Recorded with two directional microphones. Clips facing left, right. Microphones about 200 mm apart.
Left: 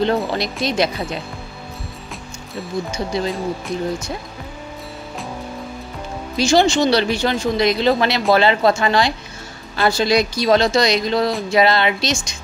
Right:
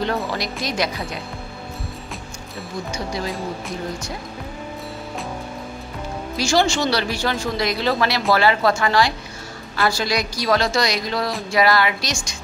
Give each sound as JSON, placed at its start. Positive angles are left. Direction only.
{"t": 0.0, "sound": "speech", "side_deg": 25}
{"t": 2.9, "sound": "speech", "side_deg": 25}
{"t": 6.3, "sound": "speech", "side_deg": 20}